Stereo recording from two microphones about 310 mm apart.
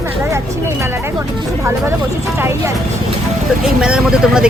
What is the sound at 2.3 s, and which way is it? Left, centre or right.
Speech, centre.